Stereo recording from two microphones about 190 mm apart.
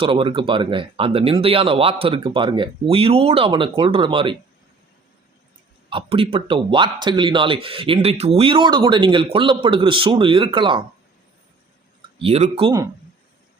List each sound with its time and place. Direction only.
0.0 s speech: 30° right (ahead or behind)
5.9 s speech: 25° right (ahead or behind)
12.2 s speech: 30° right (ahead or behind)